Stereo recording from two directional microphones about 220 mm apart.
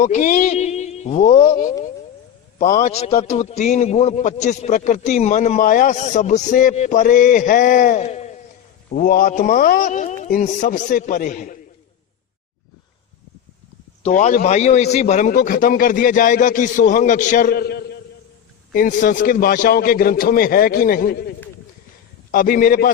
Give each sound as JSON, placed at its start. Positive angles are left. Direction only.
{"t": 0.0, "sound": "a man's voice", "side_deg": 35}
{"t": 14.0, "sound": "a man's voice", "side_deg": 30}